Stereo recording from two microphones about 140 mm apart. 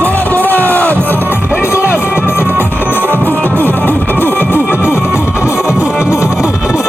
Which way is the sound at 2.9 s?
15° left (ahead or behind).